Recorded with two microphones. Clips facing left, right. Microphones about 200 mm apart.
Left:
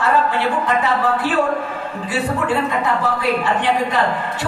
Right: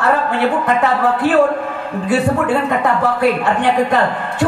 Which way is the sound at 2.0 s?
60° right (ahead or behind).